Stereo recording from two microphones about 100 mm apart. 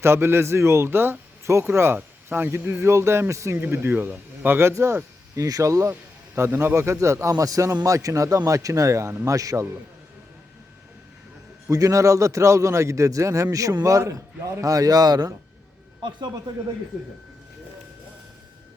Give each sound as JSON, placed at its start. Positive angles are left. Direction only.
{"t": 0.0, "sound": "a man's voice", "side_deg": -25}
{"t": 11.7, "sound": "a man's voice", "side_deg": -35}